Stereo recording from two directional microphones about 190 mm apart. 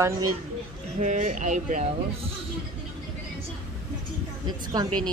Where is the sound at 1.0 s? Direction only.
40° right (ahead or behind).